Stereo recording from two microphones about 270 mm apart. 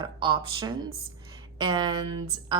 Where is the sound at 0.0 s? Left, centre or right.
Centre.